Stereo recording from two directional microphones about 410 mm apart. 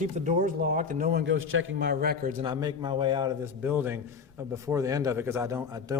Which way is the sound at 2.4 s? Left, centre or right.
Centre.